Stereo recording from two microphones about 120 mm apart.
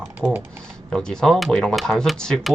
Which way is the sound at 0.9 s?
5° left (ahead or behind).